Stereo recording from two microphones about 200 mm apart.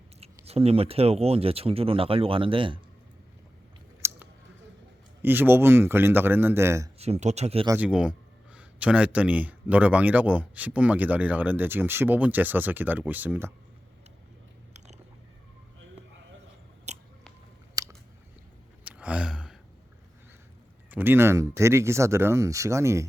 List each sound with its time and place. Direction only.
0.2 s speech: 30° right (ahead or behind)
4.0 s a sound: 15° right (ahead or behind)
5.2 s speech: 10° right (ahead or behind)
7.0 s speech: 35° right (ahead or behind)
7.7 s speech: 5° right (ahead or behind)
16.9 s biting: 35° right (ahead or behind)
17.8 s biting: 15° right (ahead or behind)
18.9 s gasp: 5° right (ahead or behind)
20.9 s speech: 10° right (ahead or behind)